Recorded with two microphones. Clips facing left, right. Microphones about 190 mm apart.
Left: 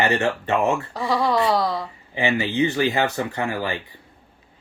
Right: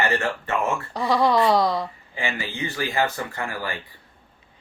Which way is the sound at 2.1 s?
20° left (ahead or behind).